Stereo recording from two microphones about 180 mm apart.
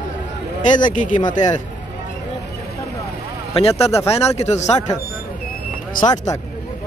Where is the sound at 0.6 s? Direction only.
45° left (ahead or behind).